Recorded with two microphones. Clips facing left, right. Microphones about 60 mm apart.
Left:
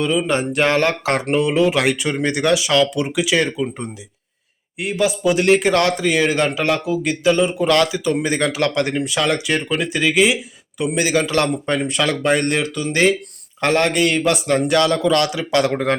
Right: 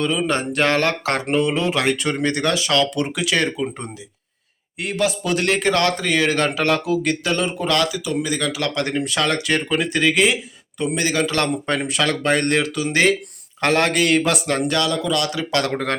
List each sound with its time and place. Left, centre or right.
0.0 s speech: centre
1.3 s speech: centre
7.7 s speech: left
8.7 s speech: left; by 10.3 s centre
10.8 s speech: centre
11.4 s speech: centre
12.7 s speech: centre
14.7 s speech: left
15.3 s speech: centre